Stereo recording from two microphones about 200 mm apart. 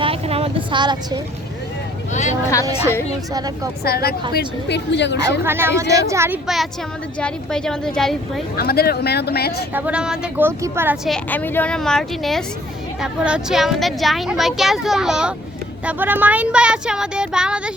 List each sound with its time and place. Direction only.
0.0 s a sound: 30° right (ahead or behind)
2.6 s a woman's voice: 15° right (ahead or behind)
3.8 s a woman's voice: 50° left (ahead or behind)
5.5 s speech: 10° right (ahead or behind)
7.2 s speech: 5° left (ahead or behind)
8.5 s speech: 50° left (ahead or behind)
9.7 s speech: 5° right (ahead or behind)
11.1 s speech: 10° left (ahead or behind)